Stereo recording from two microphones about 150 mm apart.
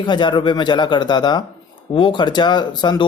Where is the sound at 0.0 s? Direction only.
30° left (ahead or behind).